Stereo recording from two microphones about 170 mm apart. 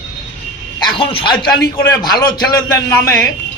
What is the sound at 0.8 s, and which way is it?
A man's voice, 30° left (ahead or behind).